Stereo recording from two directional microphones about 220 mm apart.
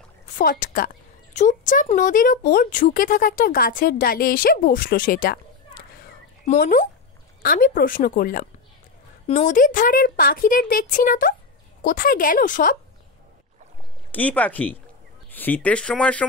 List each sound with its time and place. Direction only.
0.4 s speech: 40° left (ahead or behind)
14.1 s speech: 5° left (ahead or behind)